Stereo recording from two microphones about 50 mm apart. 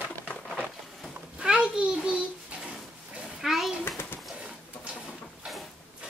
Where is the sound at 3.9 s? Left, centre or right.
Left.